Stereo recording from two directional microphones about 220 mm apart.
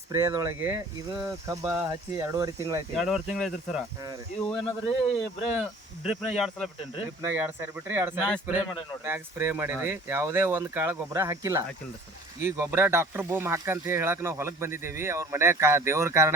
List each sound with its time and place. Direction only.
0.1 s speech: 15° right (ahead or behind)
2.9 s speech: centre (ahead or behind)
4.6 s speech: 25° left (ahead or behind)
5.2 s speech: centre (ahead or behind)